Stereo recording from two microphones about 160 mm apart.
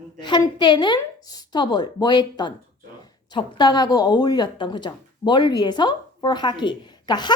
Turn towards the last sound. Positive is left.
turn(degrees=25)  # may be behind; listen again after turning